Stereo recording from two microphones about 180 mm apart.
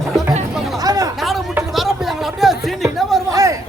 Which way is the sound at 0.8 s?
20° right (ahead or behind).